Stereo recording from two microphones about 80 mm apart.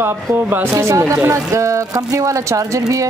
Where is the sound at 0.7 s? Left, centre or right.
Right.